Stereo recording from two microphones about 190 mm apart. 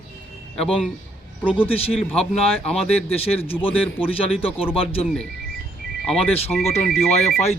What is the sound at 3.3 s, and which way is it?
Speech, 30° left (ahead or behind).